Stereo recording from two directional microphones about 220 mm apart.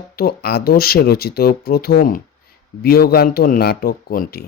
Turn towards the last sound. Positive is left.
turn(degrees=45)  # may be behind; listen again after turning